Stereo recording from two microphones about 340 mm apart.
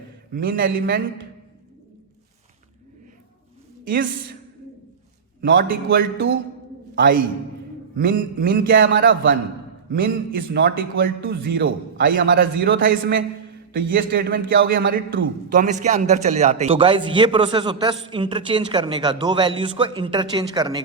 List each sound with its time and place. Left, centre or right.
0.3 s a man's voice: right
3.8 s a man's voice: right
5.4 s a man's voice: right